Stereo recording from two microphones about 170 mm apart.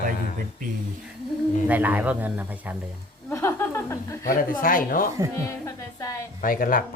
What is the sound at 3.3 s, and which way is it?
Chuckle, 15° left (ahead or behind).